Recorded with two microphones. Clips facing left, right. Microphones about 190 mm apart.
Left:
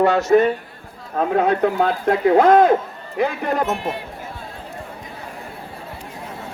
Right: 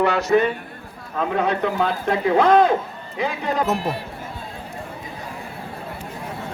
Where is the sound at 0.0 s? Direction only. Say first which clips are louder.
Left 3 dB; 45° left (ahead or behind).